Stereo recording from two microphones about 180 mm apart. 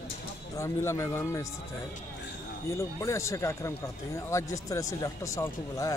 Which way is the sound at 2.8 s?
15° left (ahead or behind).